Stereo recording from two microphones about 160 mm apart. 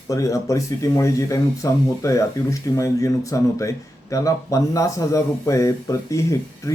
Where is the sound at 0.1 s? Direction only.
20° left (ahead or behind).